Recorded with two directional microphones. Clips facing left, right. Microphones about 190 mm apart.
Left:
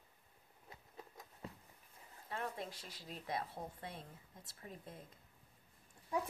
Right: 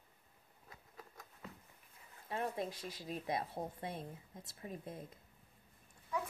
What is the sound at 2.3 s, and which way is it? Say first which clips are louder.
Speech: right 5 dB; 20° right (ahead or behind).